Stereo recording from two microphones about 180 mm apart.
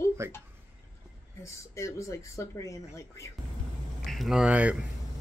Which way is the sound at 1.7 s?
15° left (ahead or behind).